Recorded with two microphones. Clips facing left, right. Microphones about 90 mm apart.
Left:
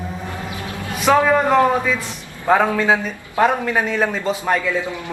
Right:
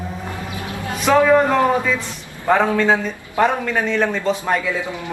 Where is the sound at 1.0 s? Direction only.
10° left (ahead or behind).